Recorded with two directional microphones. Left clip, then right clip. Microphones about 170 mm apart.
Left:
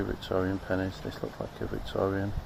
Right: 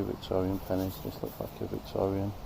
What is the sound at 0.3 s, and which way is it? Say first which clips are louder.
Speech: left 1 dB; 5° left (ahead or behind).